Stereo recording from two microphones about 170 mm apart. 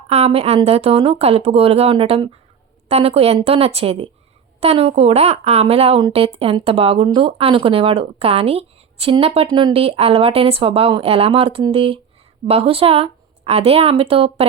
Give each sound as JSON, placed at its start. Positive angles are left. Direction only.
{"t": 0.1, "sound": "speech", "side_deg": -35}